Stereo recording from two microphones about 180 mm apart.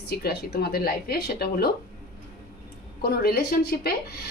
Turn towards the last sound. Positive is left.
turn(degrees=60)  # may be behind; listen again after turning